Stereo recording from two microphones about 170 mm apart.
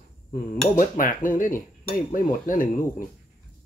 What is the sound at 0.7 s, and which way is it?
Speech, 50° left (ahead or behind).